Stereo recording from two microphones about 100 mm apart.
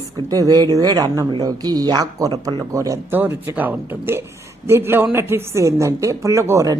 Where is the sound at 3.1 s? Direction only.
20° right (ahead or behind).